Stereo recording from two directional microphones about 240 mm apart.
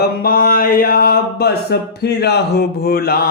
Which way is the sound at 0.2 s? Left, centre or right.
Left.